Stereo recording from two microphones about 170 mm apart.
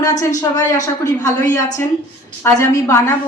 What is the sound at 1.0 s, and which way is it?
A woman's voice, 20° left (ahead or behind).